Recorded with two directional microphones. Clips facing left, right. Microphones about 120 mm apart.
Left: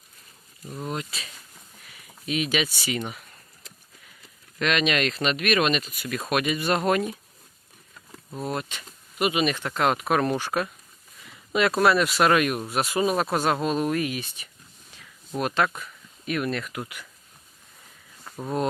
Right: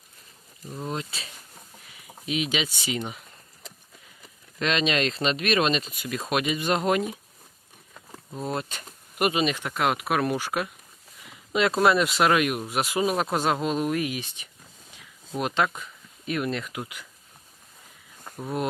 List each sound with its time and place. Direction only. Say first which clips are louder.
0.9 s speech: even; 30° right (ahead or behind)
4.6 s speech: left 1 dB; 25° right (ahead or behind)
8.7 s a sound: right 1 dB; 45° right (ahead or behind)
9.3 s speech: left 1 dB; 20° right (ahead or behind)
11.3 s a sound: left 1 dB; 20° right (ahead or behind)
11.8 s speech: even; 20° right (ahead or behind)